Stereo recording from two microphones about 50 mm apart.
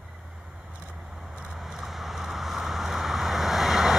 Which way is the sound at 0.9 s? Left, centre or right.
Centre.